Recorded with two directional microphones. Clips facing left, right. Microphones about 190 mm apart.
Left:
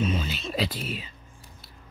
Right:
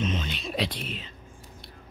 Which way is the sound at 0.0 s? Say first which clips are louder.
Left 2 dB; 5° left (ahead or behind).